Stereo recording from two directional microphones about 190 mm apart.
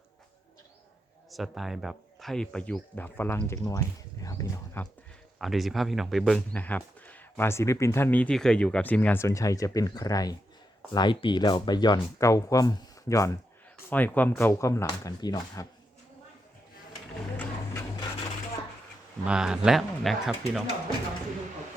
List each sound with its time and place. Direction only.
1.3 s speech: centre (ahead or behind)
5.4 s speech: centre (ahead or behind); by 15.6 s 20° left (ahead or behind)
17.3 s a sound: 10° left (ahead or behind)
19.2 s speech: 5° right (ahead or behind)